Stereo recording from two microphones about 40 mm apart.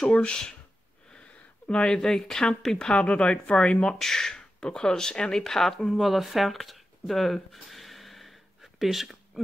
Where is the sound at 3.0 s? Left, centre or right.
Left.